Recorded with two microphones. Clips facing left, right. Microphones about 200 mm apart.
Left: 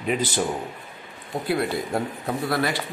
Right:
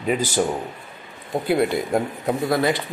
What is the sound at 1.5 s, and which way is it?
Speech, 20° right (ahead or behind).